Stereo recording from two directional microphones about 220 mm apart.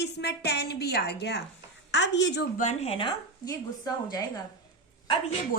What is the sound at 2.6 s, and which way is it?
Speech, 30° left (ahead or behind).